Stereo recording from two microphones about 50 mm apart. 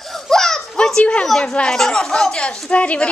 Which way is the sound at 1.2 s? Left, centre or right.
Centre.